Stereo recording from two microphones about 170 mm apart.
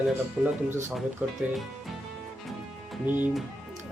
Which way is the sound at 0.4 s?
5° right (ahead or behind).